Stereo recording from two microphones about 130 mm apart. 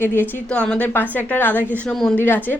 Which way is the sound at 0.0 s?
15° left (ahead or behind).